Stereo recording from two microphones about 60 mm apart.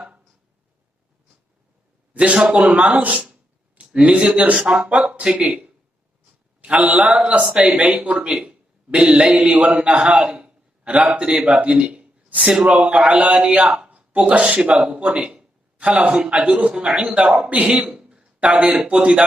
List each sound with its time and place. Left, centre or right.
2.1 s a man's voice: centre